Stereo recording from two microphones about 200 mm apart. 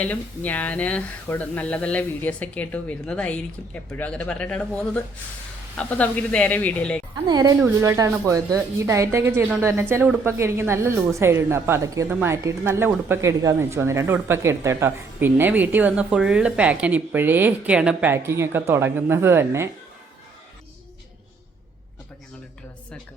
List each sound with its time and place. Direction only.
0.0 s speech: 5° left (ahead or behind)
7.3 s a woman's voice: 20° right (ahead or behind)